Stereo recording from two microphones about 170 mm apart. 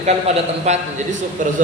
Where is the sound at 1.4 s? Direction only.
50° right (ahead or behind).